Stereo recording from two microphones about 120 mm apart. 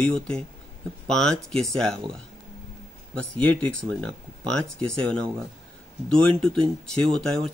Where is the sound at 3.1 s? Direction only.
10° left (ahead or behind).